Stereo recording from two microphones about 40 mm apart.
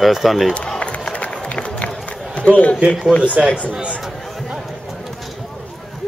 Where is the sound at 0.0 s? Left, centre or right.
Centre.